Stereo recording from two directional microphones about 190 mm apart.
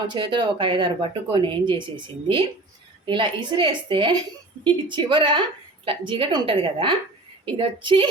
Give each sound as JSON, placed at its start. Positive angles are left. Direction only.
{"t": 0.1, "sound": "speech", "side_deg": -25}